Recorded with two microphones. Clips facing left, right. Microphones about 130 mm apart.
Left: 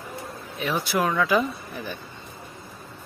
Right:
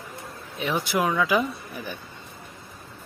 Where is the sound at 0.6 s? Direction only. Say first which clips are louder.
Even; 15° right (ahead or behind).